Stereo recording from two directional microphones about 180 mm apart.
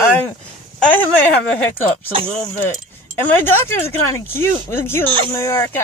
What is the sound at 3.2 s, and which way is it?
Speech, 10° left (ahead or behind).